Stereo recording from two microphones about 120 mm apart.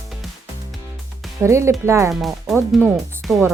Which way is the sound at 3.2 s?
Centre (ahead or behind).